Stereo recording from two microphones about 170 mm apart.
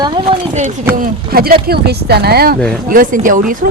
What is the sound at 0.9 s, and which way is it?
Speech, 55° right (ahead or behind).